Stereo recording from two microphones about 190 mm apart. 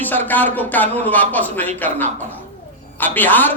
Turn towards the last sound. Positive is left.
turn(degrees=10)  # may be behind; listen again after turning